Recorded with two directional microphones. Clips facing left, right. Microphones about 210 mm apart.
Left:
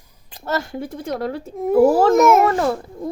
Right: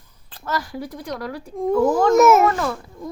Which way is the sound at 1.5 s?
5° left (ahead or behind).